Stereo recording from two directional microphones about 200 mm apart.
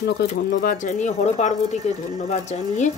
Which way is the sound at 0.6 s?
45° left (ahead or behind).